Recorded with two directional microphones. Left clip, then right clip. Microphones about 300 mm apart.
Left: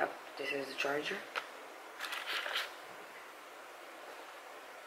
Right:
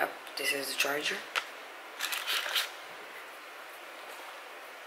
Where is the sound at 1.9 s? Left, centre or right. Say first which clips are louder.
Right 6 dB; centre.